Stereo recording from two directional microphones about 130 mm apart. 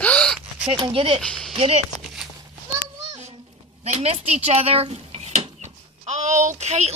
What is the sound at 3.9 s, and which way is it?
A woman's voice, 50° right (ahead or behind).